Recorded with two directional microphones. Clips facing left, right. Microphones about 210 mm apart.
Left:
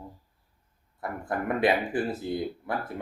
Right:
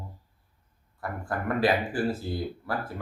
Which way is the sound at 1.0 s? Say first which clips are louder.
Left 1 dB; 20° left (ahead or behind).